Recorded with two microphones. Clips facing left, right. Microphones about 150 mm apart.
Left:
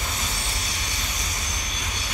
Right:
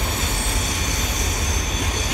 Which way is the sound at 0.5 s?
45° right (ahead or behind).